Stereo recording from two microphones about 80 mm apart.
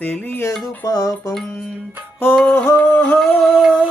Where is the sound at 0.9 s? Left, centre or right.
Left.